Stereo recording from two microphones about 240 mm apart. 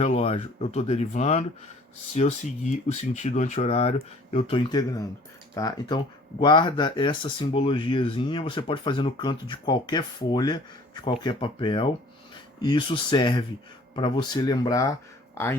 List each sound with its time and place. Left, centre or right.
0.0 s speech: left; by 15.5 s centre